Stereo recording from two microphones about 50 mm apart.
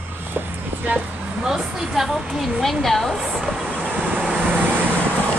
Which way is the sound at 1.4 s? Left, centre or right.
Centre.